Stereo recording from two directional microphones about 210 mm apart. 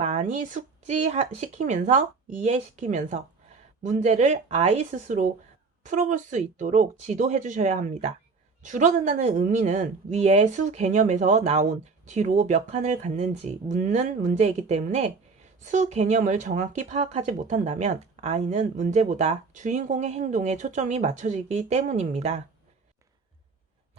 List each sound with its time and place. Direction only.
0.0 s speech: 30° right (ahead or behind)